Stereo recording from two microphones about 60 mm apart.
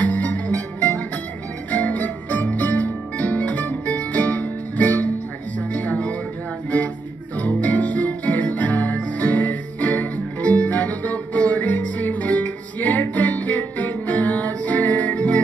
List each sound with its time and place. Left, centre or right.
0.0 s music: left
7.3 s music: left